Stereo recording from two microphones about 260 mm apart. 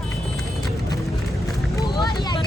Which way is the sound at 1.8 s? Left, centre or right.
Centre.